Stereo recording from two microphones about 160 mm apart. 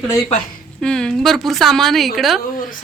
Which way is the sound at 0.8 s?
5° left (ahead or behind).